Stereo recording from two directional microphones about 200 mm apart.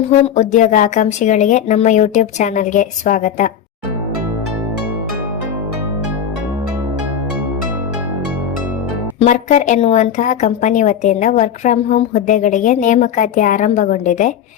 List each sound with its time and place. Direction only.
0.3 s a woman's voice: 40° left (ahead or behind)
9.2 s a woman's voice: 35° left (ahead or behind)